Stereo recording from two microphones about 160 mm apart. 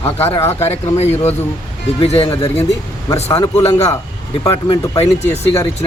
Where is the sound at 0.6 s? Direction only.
40° left (ahead or behind).